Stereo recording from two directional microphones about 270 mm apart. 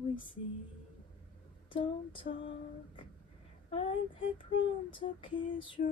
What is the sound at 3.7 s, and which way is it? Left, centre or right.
Female singing, left.